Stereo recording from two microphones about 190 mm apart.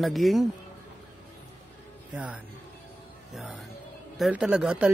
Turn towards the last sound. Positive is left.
turn(degrees=-5)  # may be behind; listen again after turning